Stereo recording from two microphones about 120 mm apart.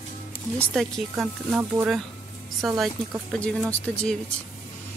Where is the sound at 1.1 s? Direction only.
10° right (ahead or behind).